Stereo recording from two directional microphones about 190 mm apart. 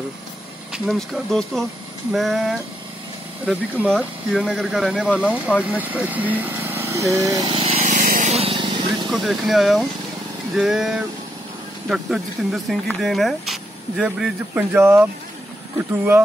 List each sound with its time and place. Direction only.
0.7 s speech: centre (ahead or behind)
5.7 s vehicle: 10° right (ahead or behind); by 9.1 s 25° right (ahead or behind)
9.1 s speech: centre (ahead or behind)